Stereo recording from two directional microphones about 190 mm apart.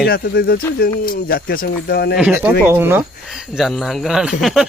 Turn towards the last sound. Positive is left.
turn(degrees=0)  # may be behind; listen again after turning